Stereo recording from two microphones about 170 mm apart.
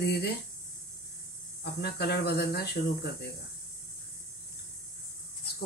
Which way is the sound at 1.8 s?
70° left (ahead or behind).